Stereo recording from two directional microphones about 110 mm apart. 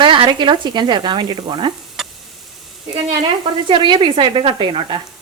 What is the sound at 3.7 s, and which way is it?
Stir, 45° right (ahead or behind).